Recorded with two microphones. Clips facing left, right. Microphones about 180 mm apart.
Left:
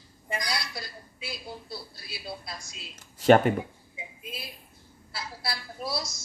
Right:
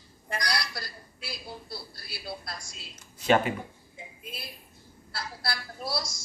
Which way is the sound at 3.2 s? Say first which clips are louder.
Left 5 dB; 50° left (ahead or behind).